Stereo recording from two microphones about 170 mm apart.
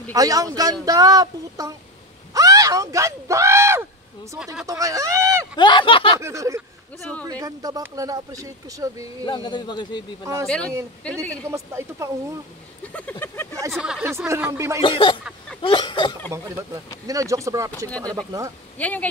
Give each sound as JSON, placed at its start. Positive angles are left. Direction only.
{"t": 0.1, "sound": "speech", "side_deg": -20}
{"t": 5.6, "sound": "a man's voice", "side_deg": 30}
{"t": 6.2, "sound": "speech", "side_deg": -20}
{"t": 9.2, "sound": "a man's voice", "side_deg": 30}
{"t": 10.4, "sound": "speech", "side_deg": 5}
{"t": 11.5, "sound": "speech", "side_deg": -20}
{"t": 12.8, "sound": "speech", "side_deg": 10}
{"t": 13.7, "sound": "speech", "side_deg": 0}
{"t": 14.0, "sound": "speech", "side_deg": -15}
{"t": 14.8, "sound": "a man's voice", "side_deg": 30}
{"t": 16.3, "sound": "speech", "side_deg": -15}
{"t": 18.8, "sound": "speech", "side_deg": 10}